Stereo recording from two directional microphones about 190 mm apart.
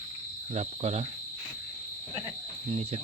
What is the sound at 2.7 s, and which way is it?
Cricket, 35° right (ahead or behind).